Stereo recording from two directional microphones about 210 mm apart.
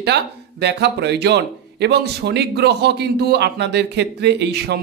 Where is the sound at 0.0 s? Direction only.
55° right (ahead or behind).